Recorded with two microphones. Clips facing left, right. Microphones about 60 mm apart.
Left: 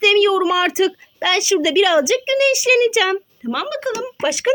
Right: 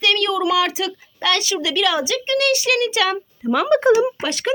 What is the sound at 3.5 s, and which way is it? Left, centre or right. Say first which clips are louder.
Speech: right 8 dB; right.